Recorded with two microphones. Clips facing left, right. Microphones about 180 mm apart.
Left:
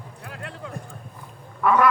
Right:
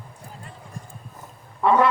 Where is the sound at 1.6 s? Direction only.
25° right (ahead or behind).